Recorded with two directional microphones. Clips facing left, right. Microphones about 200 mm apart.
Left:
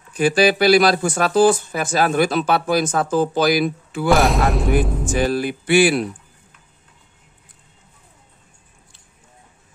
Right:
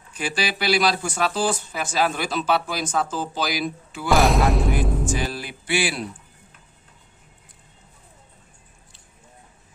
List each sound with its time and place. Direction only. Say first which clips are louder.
0.2 s speech: left 11 dB; 45° left (ahead or behind)
4.1 s speech: left 2 dB; centre (ahead or behind)
4.8 s music: even; centre (ahead or behind)
5.1 s speech: left 8 dB; 55° left (ahead or behind)